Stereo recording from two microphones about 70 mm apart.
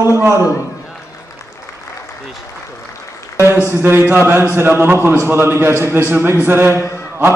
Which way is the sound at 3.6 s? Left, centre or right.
Right.